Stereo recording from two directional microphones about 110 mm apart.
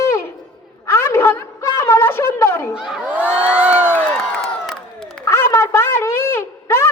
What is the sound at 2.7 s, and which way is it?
Crowd, 5° right (ahead or behind).